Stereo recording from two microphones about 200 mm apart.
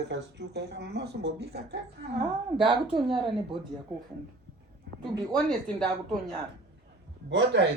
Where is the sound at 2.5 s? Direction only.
25° right (ahead or behind).